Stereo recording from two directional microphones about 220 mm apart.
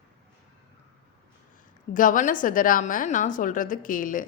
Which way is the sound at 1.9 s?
35° left (ahead or behind).